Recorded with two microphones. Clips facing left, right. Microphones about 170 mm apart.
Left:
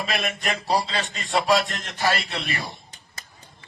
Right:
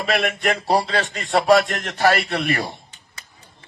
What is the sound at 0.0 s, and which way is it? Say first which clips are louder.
A man's voice: right 6 dB; 65° right (ahead or behind).